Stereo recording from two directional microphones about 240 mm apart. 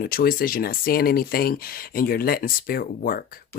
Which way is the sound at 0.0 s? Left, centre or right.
Left.